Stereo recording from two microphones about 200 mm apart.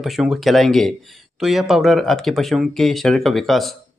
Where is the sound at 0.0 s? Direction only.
Centre (ahead or behind).